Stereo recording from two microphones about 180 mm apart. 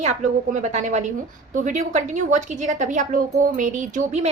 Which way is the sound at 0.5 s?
40° right (ahead or behind).